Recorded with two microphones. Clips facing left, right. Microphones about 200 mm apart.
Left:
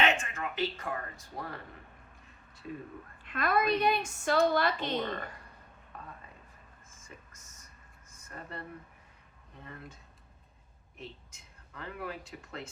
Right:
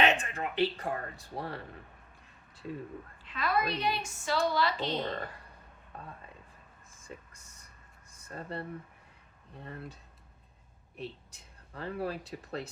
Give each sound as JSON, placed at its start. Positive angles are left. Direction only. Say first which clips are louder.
{"t": 0.0, "sound": "speech", "louder": "right 2 dB", "side_deg": -35}
{"t": 3.2, "sound": "a woman's voice", "louder": "left 3 dB", "side_deg": 50}
{"t": 7.0, "sound": "a sound", "louder": "right 6 dB", "side_deg": -30}
{"t": 8.3, "sound": "speech", "louder": "right 5 dB", "side_deg": -30}
{"t": 10.9, "sound": "speech", "louder": "right 5 dB", "side_deg": -35}